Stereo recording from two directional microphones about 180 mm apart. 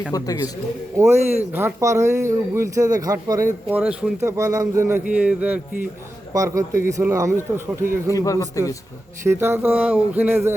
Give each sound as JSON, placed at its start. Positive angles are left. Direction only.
{"t": 0.1, "sound": "speech", "side_deg": 20}
{"t": 0.9, "sound": "a man's voice", "side_deg": -15}
{"t": 8.1, "sound": "a man's voice", "side_deg": 20}
{"t": 9.2, "sound": "a man's voice", "side_deg": -15}